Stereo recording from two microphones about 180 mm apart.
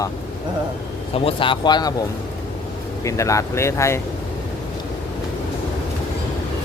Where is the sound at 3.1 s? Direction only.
15° left (ahead or behind).